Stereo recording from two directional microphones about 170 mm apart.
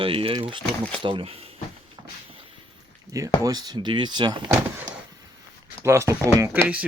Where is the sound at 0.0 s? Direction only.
30° right (ahead or behind).